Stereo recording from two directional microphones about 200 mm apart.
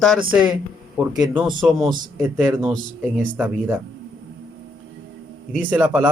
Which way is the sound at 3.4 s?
10° right (ahead or behind).